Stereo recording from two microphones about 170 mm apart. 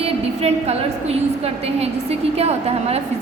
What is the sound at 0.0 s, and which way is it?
A woman's voice, 40° right (ahead or behind).